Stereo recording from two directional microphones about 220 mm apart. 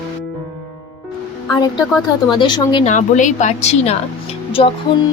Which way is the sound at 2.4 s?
20° left (ahead or behind).